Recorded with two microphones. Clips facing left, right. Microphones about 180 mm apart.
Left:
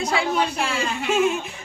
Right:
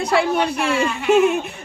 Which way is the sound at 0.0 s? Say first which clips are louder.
Right 4 dB; 65° right (ahead or behind).